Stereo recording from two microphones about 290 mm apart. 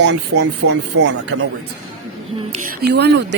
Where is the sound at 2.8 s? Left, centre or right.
Right.